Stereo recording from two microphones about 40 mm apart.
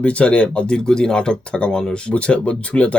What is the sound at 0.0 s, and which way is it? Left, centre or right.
Speech, left.